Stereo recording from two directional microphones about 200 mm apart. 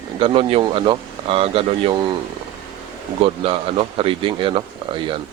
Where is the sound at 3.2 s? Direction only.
30° right (ahead or behind).